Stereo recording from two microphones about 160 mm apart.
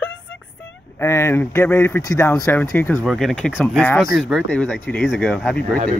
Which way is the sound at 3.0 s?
Centre (ahead or behind).